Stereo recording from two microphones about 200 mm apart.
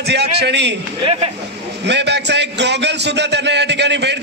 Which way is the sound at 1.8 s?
60° right (ahead or behind).